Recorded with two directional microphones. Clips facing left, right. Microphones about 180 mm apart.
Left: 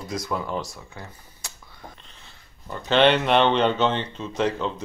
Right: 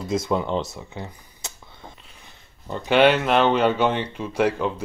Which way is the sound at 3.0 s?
5° right (ahead or behind).